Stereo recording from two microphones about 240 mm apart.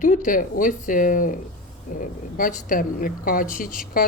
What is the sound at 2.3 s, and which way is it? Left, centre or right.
Speech, left.